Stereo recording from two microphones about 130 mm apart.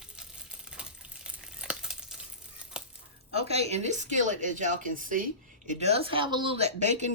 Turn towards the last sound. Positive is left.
turn(degrees=-60)  # may be behind; listen again after turning